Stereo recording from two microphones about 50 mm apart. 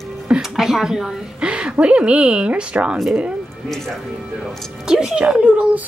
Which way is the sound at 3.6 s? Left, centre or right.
Centre.